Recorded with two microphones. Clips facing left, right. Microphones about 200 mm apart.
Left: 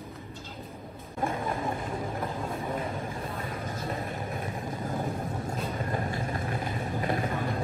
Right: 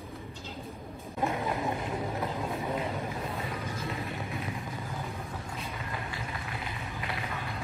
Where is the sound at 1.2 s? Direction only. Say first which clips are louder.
Even; 10° right (ahead or behind).